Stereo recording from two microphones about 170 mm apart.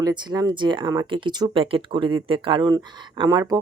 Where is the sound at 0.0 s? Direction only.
25° right (ahead or behind).